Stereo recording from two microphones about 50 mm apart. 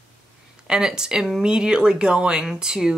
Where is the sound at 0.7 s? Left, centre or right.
Centre.